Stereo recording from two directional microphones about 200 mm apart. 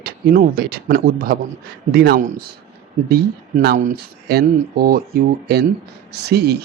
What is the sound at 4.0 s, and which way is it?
Speech, 55° right (ahead or behind).